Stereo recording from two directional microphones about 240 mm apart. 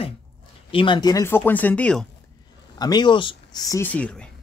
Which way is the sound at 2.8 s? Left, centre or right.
Centre.